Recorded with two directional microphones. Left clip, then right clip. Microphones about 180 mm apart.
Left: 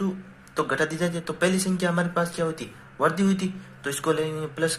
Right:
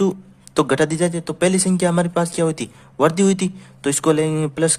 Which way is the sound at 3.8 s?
60° right (ahead or behind).